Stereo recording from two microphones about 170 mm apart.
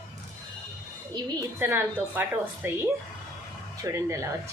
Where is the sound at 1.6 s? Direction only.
15° right (ahead or behind).